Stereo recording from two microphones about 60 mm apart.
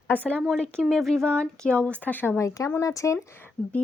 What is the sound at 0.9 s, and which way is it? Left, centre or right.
Speech, centre.